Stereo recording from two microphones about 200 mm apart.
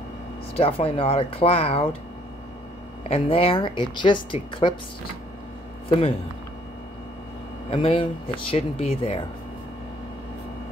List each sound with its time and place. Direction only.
0.6 s speech: 30° left (ahead or behind)
3.1 s speech: 30° left (ahead or behind)
5.9 s speech: 30° left (ahead or behind)
7.7 s speech: 25° left (ahead or behind)